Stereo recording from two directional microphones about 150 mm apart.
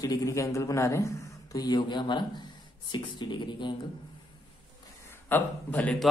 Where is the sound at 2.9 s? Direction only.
30° left (ahead or behind).